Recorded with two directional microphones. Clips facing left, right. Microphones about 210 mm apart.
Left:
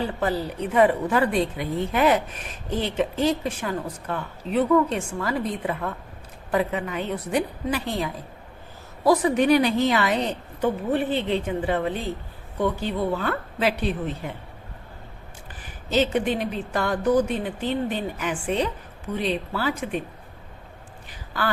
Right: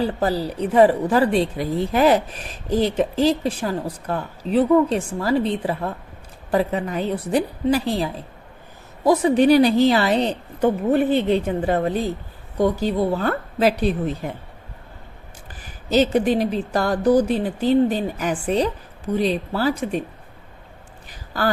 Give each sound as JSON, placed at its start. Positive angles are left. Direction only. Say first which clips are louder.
{"t": 0.0, "sound": "a woman's voice", "louder": "right 4 dB", "side_deg": -35}
{"t": 10.9, "sound": "a woman's voice", "louder": "right 6 dB", "side_deg": -45}
{"t": 15.9, "sound": "a woman's voice", "louder": "right 5 dB", "side_deg": -40}
{"t": 21.3, "sound": "a woman's voice", "louder": "right 5 dB", "side_deg": -40}